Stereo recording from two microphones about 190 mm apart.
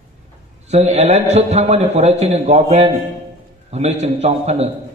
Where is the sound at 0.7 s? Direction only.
35° right (ahead or behind).